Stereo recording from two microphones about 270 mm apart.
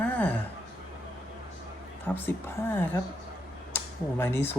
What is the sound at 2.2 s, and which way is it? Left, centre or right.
A woman's voice, centre.